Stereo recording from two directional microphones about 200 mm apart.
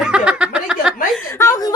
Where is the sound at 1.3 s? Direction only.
15° left (ahead or behind).